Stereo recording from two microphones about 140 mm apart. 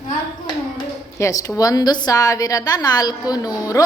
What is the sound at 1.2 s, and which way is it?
A woman's voice, 25° left (ahead or behind).